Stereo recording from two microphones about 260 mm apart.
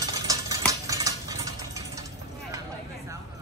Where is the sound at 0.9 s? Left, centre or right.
Centre.